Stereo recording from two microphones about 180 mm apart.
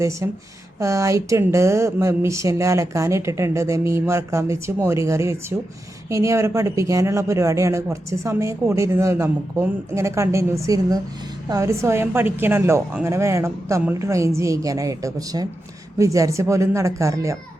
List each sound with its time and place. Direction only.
0.0 s speech: 15° right (ahead or behind)